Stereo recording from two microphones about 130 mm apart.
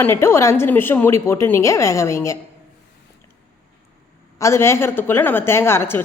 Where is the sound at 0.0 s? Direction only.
20° left (ahead or behind).